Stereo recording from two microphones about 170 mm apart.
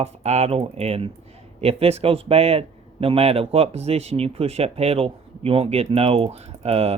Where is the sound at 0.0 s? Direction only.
40° right (ahead or behind).